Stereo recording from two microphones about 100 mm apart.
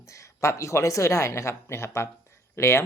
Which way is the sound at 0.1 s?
30° left (ahead or behind).